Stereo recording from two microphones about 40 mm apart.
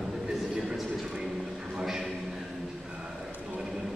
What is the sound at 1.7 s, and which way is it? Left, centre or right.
Speech, centre.